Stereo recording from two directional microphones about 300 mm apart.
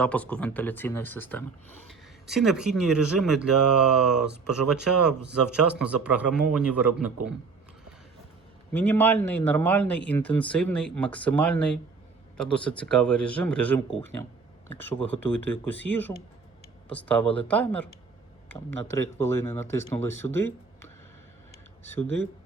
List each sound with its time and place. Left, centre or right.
0.0 s speech: centre
5.7 s speech: centre
8.7 s speech: centre
20.3 s a sound: centre
21.9 s speech: right